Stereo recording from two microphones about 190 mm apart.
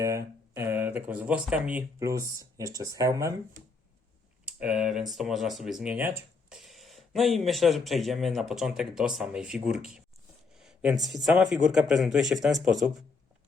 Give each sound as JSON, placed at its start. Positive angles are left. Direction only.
{"t": 0.0, "sound": "speech", "side_deg": -15}
{"t": 4.4, "sound": "speech", "side_deg": -5}
{"t": 10.5, "sound": "a sound", "side_deg": -5}
{"t": 11.1, "sound": "speech", "side_deg": 0}